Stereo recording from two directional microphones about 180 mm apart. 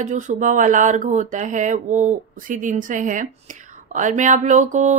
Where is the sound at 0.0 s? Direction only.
40° right (ahead or behind).